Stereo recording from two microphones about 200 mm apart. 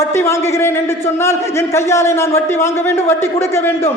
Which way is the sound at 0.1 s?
15° left (ahead or behind).